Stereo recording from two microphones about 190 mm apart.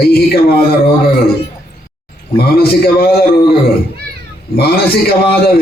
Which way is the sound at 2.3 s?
55° left (ahead or behind).